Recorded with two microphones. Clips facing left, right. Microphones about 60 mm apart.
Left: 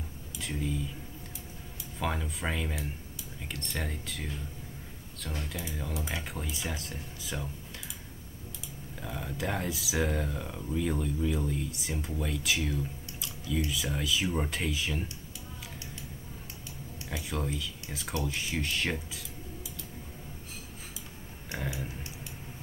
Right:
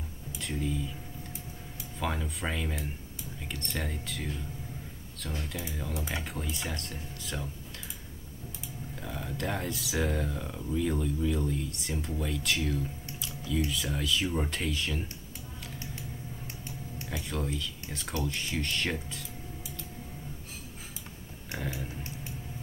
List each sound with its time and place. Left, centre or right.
0.4 s speech: centre
2.0 s speech: centre
9.0 s speech: centre
17.1 s speech: centre